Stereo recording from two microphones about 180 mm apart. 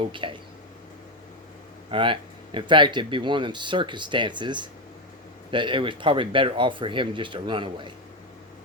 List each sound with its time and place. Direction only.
0.0 s speech: 30° right (ahead or behind)
1.9 s speech: 30° right (ahead or behind)